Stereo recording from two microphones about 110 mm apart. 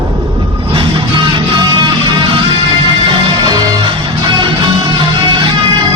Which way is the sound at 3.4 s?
40° right (ahead or behind).